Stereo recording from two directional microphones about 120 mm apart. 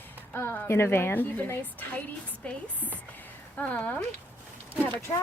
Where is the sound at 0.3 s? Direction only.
15° left (ahead or behind).